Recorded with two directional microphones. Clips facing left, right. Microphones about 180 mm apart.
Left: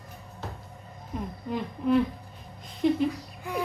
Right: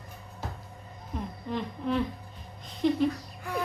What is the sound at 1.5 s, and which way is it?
Speech, 5° left (ahead or behind).